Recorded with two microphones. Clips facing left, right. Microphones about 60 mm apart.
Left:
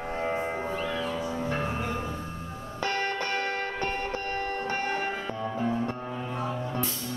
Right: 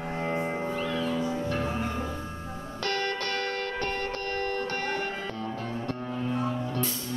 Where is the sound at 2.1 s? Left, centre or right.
Centre.